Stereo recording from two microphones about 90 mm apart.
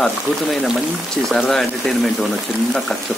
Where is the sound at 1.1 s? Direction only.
5° left (ahead or behind).